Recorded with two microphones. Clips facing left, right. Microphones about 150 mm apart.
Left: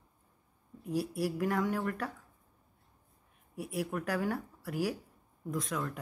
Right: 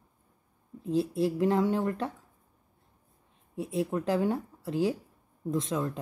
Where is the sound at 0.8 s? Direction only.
25° right (ahead or behind).